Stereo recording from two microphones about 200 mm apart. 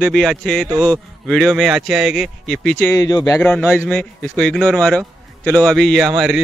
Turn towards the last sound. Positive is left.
turn(degrees=0)  # may be behind; listen again after turning